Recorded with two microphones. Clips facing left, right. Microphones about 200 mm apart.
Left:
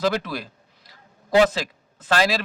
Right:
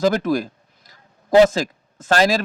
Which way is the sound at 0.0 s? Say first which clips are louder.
Right 6 dB; 45° right (ahead or behind).